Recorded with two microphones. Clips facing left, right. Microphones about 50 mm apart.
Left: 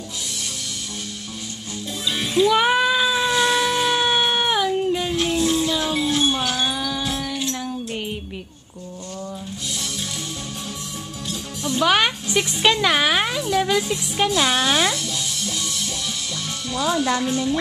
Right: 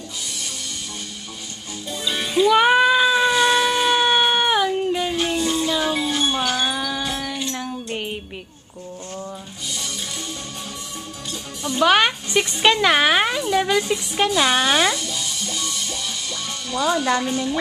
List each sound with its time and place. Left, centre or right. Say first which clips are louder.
2.0 s music: right 1 dB; centre
11.2 s speech: left 2 dB; centre